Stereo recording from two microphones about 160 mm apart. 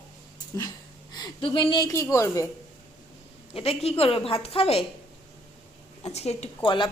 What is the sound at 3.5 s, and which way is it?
A woman's voice, 35° left (ahead or behind).